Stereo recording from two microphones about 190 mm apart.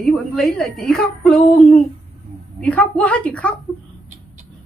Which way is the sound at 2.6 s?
5° left (ahead or behind).